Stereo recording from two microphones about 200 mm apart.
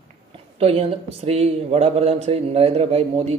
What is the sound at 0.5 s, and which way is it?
A man's voice, 30° right (ahead or behind).